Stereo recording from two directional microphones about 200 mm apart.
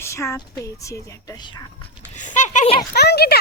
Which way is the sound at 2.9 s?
55° left (ahead or behind).